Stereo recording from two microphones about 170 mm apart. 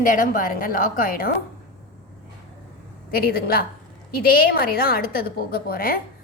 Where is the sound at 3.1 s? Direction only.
60° left (ahead or behind).